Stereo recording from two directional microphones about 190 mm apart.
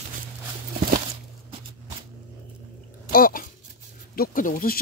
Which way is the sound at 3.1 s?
50° left (ahead or behind).